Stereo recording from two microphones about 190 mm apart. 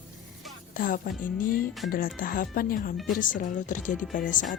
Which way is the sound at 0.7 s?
45° left (ahead or behind).